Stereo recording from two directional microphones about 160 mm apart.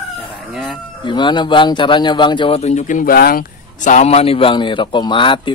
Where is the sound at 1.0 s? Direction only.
30° left (ahead or behind).